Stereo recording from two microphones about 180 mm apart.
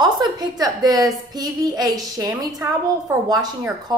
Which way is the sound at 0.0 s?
25° right (ahead or behind).